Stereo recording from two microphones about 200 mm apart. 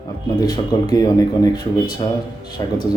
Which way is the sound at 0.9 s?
20° left (ahead or behind).